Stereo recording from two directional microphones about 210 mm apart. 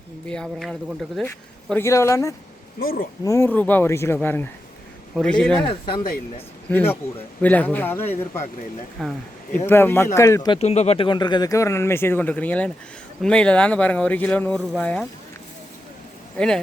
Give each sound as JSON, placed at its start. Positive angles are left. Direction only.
{"t": 0.3, "sound": "speech", "side_deg": 5}
{"t": 1.7, "sound": "speech", "side_deg": 15}
{"t": 2.7, "sound": "speech", "side_deg": 45}
{"t": 3.2, "sound": "speech", "side_deg": 10}
{"t": 5.6, "sound": "speech", "side_deg": 20}
{"t": 6.7, "sound": "speech", "side_deg": 10}
{"t": 9.0, "sound": "speech", "side_deg": 0}
{"t": 10.6, "sound": "speech", "side_deg": 30}